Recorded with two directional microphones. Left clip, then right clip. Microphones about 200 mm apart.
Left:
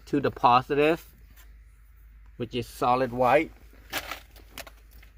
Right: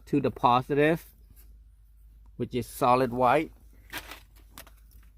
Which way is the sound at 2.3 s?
55° right (ahead or behind).